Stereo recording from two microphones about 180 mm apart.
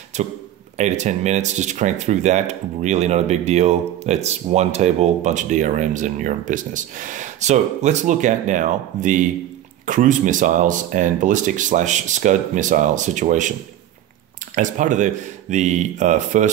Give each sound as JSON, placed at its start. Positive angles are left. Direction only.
{"t": 0.1, "sound": "speech", "side_deg": -40}